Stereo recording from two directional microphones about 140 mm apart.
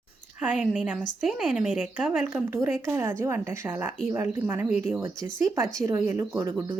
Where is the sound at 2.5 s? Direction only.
20° right (ahead or behind).